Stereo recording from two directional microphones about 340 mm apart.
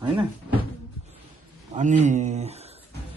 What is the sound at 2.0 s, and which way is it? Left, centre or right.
Speech, right.